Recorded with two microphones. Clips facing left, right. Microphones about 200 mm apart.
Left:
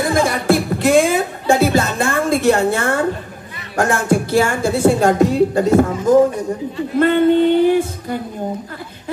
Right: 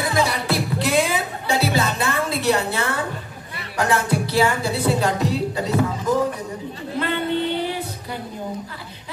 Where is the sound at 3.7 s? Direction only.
45° left (ahead or behind).